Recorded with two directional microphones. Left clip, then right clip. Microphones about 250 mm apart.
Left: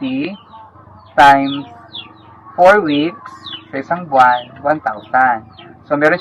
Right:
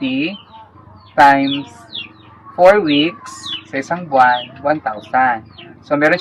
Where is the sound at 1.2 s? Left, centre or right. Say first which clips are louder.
Left 2 dB; right.